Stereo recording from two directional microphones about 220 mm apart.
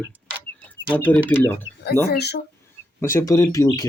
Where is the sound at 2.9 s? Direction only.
10° left (ahead or behind).